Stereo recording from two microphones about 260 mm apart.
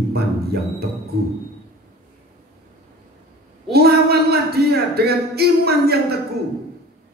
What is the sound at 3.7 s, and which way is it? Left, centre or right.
Speech, right.